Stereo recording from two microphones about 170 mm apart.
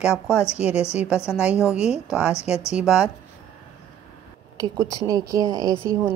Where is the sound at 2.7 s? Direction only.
5° right (ahead or behind).